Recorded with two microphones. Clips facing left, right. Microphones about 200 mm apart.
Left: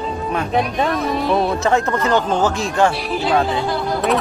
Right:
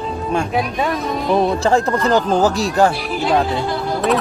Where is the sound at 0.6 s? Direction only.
Centre (ahead or behind).